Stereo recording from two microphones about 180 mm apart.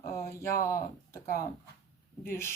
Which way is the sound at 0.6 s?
15° left (ahead or behind).